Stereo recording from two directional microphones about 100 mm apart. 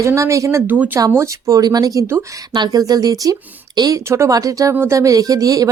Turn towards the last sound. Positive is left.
turn(degrees=-35)  # may be behind; listen again after turning